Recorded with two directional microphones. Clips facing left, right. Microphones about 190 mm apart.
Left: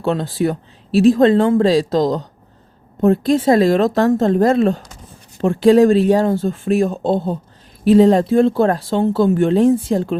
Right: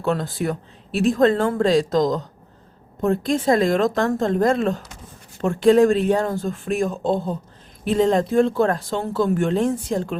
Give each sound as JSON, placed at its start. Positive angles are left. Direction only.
{"t": 0.0, "sound": "speech", "side_deg": 30}